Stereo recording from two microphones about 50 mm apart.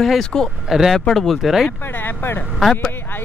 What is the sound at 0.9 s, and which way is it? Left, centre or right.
Speech, centre.